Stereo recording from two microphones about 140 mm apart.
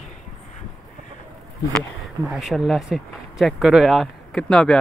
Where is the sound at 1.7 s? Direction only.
Centre (ahead or behind).